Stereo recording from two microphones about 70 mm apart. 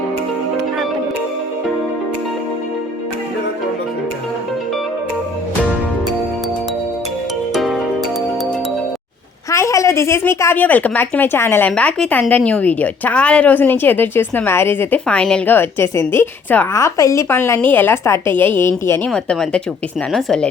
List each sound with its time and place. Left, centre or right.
7.5 s music: centre
9.5 s a woman's voice: left
11.7 s a woman's voice: left
15.0 s speech: centre
15.4 s a woman's voice: left
17.2 s a woman's voice: left
19.0 s speech: centre